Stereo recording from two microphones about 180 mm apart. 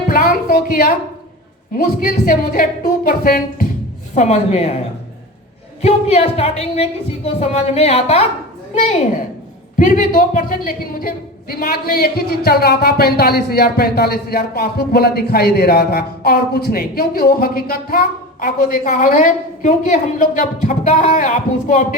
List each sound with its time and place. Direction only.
0.1 s music: 55° left (ahead or behind)
1.7 s a woman's voice: 55° left (ahead or behind)
4.1 s a woman's voice: 40° left (ahead or behind)
5.8 s a woman's voice: 35° left (ahead or behind)